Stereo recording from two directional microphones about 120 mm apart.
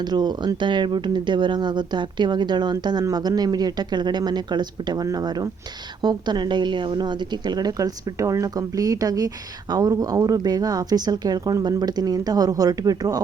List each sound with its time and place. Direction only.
0.1 s a woman's voice: 35° right (ahead or behind)